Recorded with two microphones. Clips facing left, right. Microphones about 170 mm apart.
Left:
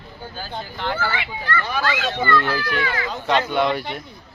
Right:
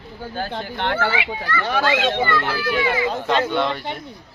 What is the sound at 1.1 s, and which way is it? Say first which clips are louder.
Speech: right 2 dB; 15° right (ahead or behind).